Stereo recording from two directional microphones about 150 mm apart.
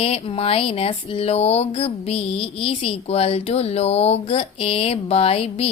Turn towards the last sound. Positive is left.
turn(degrees=40)  # may be behind; listen again after turning